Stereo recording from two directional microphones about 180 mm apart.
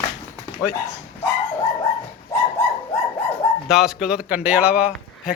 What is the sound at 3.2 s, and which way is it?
Speech, centre (ahead or behind).